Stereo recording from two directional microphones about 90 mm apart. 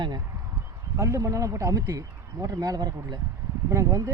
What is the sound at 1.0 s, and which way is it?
Speech, 35° right (ahead or behind).